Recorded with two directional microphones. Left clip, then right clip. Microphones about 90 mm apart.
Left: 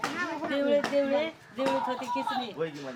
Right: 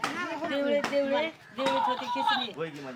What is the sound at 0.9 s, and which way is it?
Speech, centre (ahead or behind).